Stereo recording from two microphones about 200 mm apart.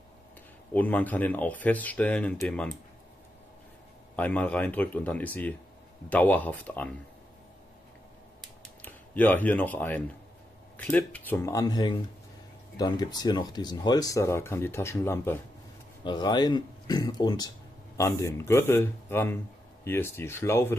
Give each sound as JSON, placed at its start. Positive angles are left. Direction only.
{"t": 0.7, "sound": "speech", "side_deg": 10}
{"t": 4.2, "sound": "speech", "side_deg": 5}
{"t": 8.4, "sound": "camera", "side_deg": 10}
{"t": 10.8, "sound": "speech", "side_deg": 5}